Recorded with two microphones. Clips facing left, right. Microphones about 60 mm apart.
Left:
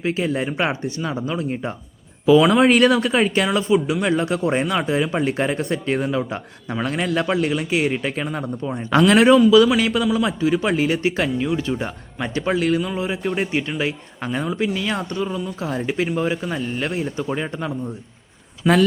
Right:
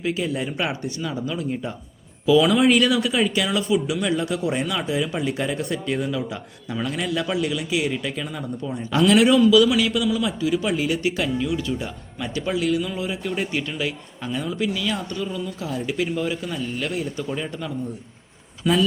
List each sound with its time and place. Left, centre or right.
0.0 s speech: left
12.8 s a man's voice: left